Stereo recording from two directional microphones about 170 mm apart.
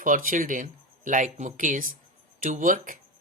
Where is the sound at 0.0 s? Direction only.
50° right (ahead or behind).